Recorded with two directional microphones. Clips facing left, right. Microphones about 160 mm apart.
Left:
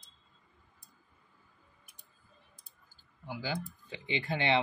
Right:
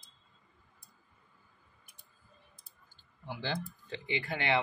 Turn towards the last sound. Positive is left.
turn(degrees=25)  # may be behind; listen again after turning